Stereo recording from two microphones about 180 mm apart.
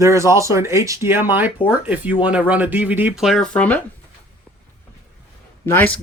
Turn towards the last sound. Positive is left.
turn(degrees=10)  # may be behind; listen again after turning